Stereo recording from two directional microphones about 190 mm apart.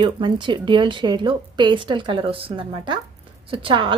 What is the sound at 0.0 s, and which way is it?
Speech, 25° right (ahead or behind).